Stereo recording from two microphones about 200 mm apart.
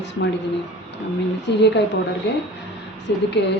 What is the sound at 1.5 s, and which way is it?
A woman's voice, 60° left (ahead or behind).